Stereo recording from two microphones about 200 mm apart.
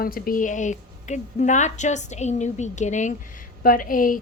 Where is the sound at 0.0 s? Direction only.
45° left (ahead or behind).